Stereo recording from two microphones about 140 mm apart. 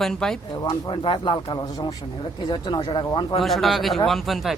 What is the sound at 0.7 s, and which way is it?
Speech, 35° left (ahead or behind).